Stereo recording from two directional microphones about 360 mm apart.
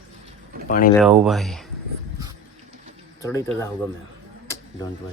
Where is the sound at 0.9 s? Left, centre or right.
Centre.